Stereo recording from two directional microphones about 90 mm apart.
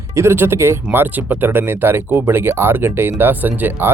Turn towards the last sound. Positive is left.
turn(degrees=-25)  # may be behind; listen again after turning